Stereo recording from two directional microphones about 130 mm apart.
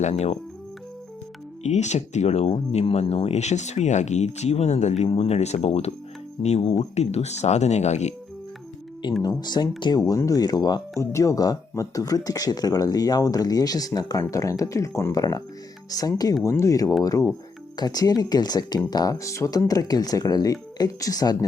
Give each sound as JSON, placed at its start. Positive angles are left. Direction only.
{"t": 0.0, "sound": "speech", "side_deg": 55}
{"t": 1.6, "sound": "speech", "side_deg": 65}
{"t": 9.0, "sound": "speech", "side_deg": 40}